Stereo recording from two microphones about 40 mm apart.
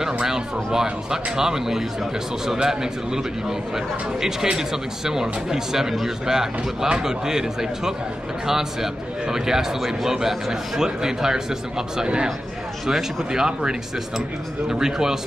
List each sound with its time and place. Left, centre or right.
0.0 s a man's voice: centre
12.8 s a man's voice: centre